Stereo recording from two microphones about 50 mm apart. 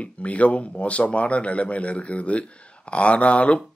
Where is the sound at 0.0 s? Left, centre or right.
Left.